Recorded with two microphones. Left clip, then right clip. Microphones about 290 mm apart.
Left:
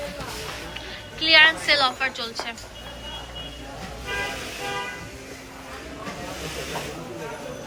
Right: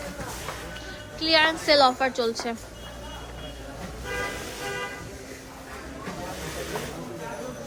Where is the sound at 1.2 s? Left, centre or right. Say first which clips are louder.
Left 6 dB; centre.